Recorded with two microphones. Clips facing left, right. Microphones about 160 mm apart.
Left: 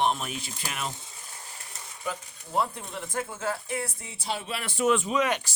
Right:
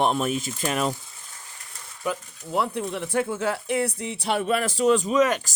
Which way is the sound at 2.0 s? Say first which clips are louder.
Right 6 dB; 65° right (ahead or behind).